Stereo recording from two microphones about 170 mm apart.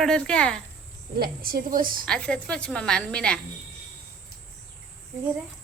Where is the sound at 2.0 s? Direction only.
5° left (ahead or behind).